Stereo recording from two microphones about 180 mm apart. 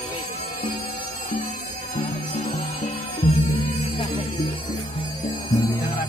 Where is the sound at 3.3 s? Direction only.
55° left (ahead or behind).